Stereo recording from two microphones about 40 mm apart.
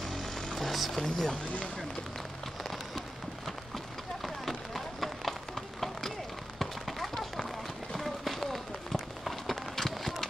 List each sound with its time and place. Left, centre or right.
0.1 s music: centre
0.9 s speech: centre
3.4 s run: centre